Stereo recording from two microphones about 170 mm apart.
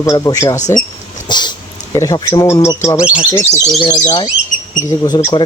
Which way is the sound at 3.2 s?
15° left (ahead or behind).